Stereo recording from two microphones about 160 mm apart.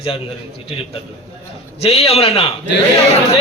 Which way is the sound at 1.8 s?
40° left (ahead or behind).